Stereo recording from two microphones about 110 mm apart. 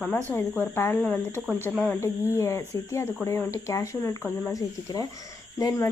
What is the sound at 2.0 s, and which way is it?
Speech, 25° left (ahead or behind).